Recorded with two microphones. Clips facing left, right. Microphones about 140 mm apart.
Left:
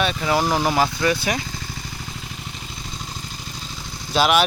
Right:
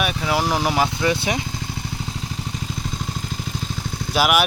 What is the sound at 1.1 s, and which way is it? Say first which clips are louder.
Speech: even; 20° right (ahead or behind).